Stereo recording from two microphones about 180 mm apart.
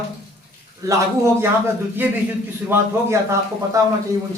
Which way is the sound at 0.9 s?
15° right (ahead or behind).